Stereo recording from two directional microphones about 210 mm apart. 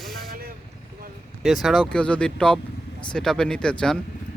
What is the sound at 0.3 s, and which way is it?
Vehicle, 45° right (ahead or behind).